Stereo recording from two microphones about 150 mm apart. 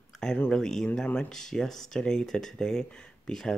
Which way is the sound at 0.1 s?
5° left (ahead or behind).